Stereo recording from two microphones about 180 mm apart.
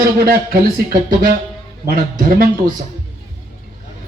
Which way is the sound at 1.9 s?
50° right (ahead or behind).